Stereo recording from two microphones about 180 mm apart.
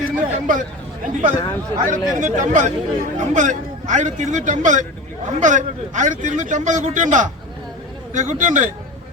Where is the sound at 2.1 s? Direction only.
45° right (ahead or behind).